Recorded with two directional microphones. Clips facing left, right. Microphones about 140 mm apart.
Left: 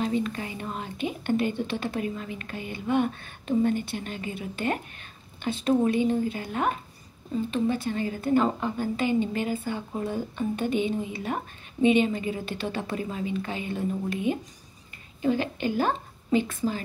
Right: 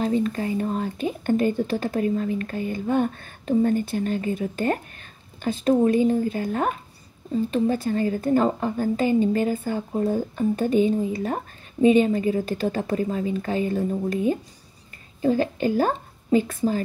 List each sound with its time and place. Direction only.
0.0 s speech: 40° right (ahead or behind)